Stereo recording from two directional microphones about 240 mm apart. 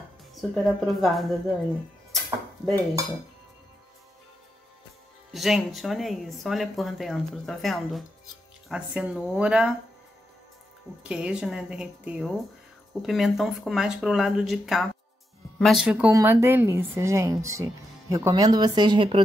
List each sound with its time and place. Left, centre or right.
0.3 s speech: centre
2.1 s a sound: centre
5.3 s speech: centre
11.1 s a woman's voice: centre; by 19.2 s right